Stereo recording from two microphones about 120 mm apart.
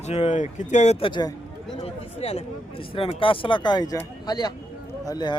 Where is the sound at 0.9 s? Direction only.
45° left (ahead or behind).